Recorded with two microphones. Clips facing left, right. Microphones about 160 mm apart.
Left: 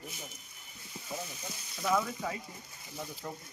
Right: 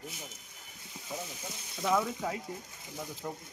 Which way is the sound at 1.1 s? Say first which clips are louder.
Even; 15° right (ahead or behind).